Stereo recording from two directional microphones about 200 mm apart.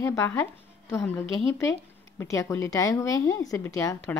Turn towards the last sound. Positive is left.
turn(degrees=15)  # may be behind; listen again after turning